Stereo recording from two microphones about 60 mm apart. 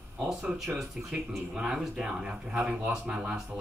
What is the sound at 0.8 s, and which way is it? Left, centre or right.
Speech, centre.